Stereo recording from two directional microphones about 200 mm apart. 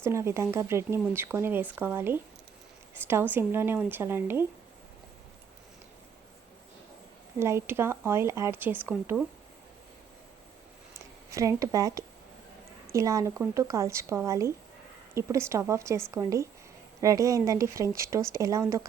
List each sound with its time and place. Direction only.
0.0 s speech: 15° right (ahead or behind)
7.3 s speech: 15° right (ahead or behind)
11.3 s speech: 15° right (ahead or behind)